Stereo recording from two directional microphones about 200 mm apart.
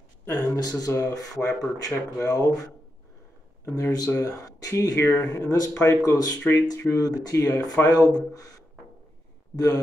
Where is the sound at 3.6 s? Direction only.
15° left (ahead or behind).